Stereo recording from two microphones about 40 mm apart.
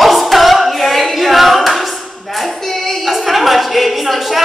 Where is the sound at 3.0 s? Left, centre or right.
Centre.